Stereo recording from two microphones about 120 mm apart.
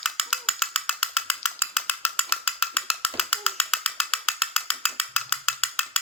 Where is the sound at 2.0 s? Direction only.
55° left (ahead or behind).